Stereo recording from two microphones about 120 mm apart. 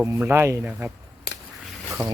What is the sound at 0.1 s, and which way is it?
Speech, 25° right (ahead or behind).